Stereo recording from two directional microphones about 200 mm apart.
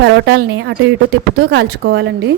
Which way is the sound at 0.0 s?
65° right (ahead or behind).